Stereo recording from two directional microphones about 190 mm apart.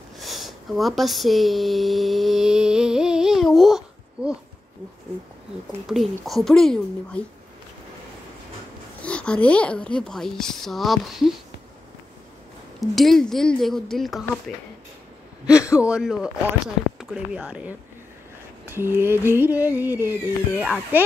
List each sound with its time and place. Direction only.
0.2 s a sound: centre (ahead or behind)
5.9 s speech: centre (ahead or behind)
9.0 s speech: 5° left (ahead or behind)
12.8 s speech: centre (ahead or behind)
15.5 s speech: 15° left (ahead or behind)
15.8 s speech: 5° right (ahead or behind)
18.7 s a sound: 10° right (ahead or behind)
19.2 s speech: 10° right (ahead or behind)